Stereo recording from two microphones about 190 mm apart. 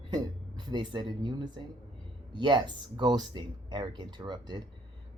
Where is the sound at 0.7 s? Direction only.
25° right (ahead or behind).